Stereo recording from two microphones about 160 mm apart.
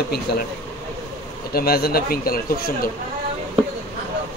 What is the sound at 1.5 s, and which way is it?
Speech, 75° left (ahead or behind).